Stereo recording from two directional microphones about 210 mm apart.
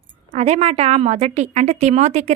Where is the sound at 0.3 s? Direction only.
30° right (ahead or behind).